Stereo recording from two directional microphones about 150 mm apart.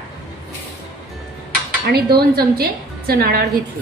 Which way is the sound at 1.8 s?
90° right.